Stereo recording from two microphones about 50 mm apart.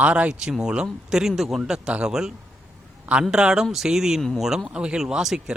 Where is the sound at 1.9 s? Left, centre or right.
Centre.